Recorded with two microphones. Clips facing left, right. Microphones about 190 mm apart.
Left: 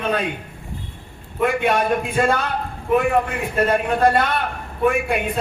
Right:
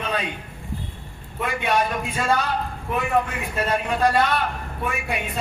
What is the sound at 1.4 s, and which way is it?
A man's voice, 55° left (ahead or behind).